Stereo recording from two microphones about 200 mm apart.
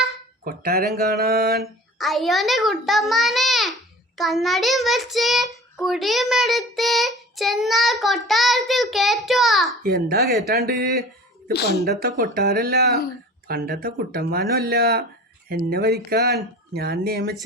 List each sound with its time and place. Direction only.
0.4 s speech: 50° right (ahead or behind)
2.0 s child singing: centre (ahead or behind)
9.8 s speech: 50° right (ahead or behind)